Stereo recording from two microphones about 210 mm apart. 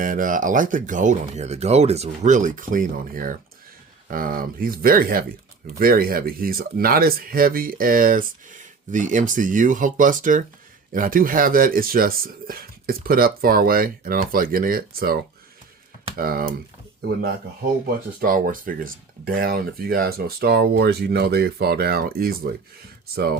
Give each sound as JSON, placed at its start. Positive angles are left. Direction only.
{"t": 0.0, "sound": "speech", "side_deg": -40}
{"t": 18.2, "sound": "speech", "side_deg": -45}